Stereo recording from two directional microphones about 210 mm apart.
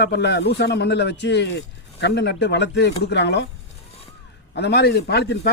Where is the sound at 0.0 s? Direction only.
55° left (ahead or behind).